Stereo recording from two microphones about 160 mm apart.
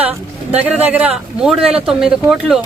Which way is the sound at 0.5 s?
10° right (ahead or behind).